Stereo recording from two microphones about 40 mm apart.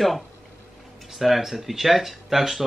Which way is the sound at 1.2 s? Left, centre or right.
Centre.